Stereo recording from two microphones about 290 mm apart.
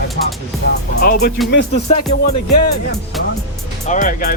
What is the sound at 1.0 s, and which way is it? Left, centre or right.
Speech, left.